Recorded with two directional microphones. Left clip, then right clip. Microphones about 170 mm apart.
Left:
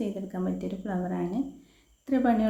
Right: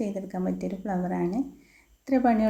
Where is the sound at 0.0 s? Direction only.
30° right (ahead or behind).